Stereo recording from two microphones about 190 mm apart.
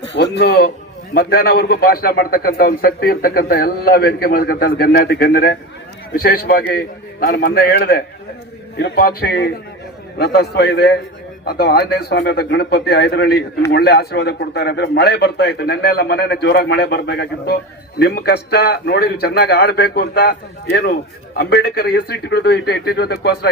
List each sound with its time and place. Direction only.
0.1 s a man's voice: 65° left (ahead or behind)
21.3 s a man's voice: 60° left (ahead or behind)